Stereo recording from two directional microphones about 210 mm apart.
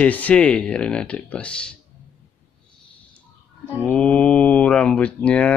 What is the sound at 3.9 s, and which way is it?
Speech, 5° left (ahead or behind).